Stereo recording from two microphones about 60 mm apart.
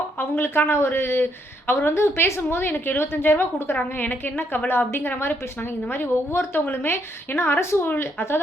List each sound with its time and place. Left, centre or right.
0.2 s a woman's voice: left